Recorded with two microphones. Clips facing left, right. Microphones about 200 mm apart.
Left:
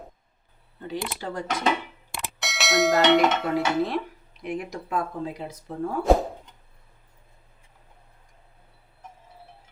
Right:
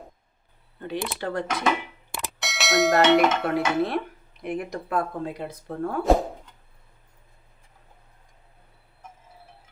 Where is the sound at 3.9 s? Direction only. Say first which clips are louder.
Right 1 dB; 55° right (ahead or behind).